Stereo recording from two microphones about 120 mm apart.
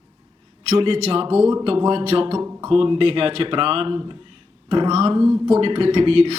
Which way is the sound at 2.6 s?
50° right (ahead or behind).